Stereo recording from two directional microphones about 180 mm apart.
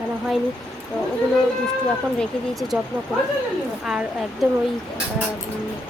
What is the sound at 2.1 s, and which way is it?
Speech, centre (ahead or behind).